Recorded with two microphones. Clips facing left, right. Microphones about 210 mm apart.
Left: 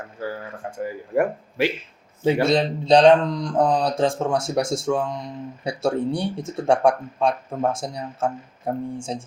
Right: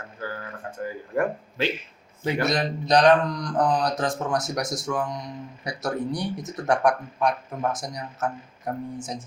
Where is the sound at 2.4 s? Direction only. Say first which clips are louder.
Left 5 dB; 25° left (ahead or behind).